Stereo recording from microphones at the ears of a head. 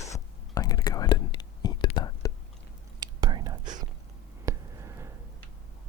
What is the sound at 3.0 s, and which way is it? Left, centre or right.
Whispering, right.